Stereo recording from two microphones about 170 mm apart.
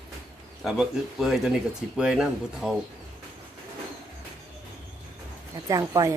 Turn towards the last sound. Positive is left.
turn(degrees=-20)  # may be behind; listen again after turning